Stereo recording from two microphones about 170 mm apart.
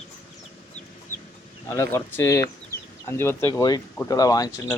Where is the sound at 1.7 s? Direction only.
15° left (ahead or behind).